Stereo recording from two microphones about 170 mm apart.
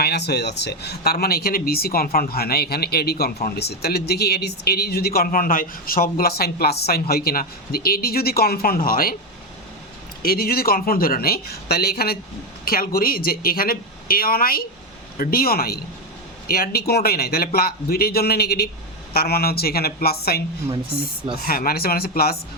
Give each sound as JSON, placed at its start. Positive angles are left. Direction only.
{"t": 0.0, "sound": "speech", "side_deg": 75}
{"t": 10.2, "sound": "speech", "side_deg": 60}
{"t": 21.4, "sound": "speech", "side_deg": 60}